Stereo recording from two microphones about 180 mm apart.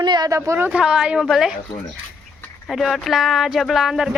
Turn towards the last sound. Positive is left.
turn(degrees=0)  # may be behind; listen again after turning